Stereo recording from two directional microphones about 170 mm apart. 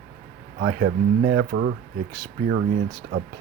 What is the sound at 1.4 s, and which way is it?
Speech, 60° right (ahead or behind).